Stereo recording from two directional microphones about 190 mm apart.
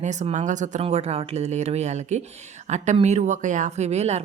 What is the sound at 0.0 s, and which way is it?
Speech, 40° right (ahead or behind).